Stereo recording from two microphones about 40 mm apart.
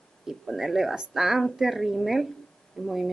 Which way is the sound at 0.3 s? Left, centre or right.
Centre.